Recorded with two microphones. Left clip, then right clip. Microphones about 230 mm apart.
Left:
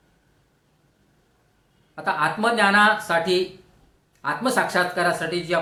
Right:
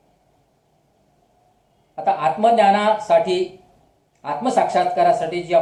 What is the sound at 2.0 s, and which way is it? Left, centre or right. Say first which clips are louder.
Speech: right 5 dB; left.